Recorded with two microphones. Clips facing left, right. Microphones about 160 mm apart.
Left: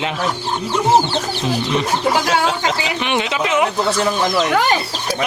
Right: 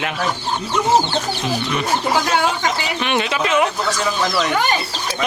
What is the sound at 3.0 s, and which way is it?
Speech, 20° left (ahead or behind).